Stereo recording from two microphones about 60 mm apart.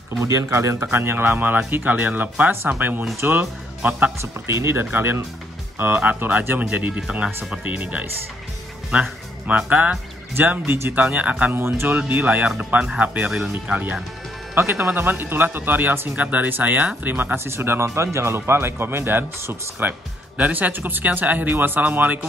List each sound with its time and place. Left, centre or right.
0.2 s speech: right
0.9 s speech: right
4.2 s speech: right
6.6 s speech: right
9.5 s speech: right
10.3 s speech: right
11.5 s speech: right
12.1 s speech: right
14.5 s speech: right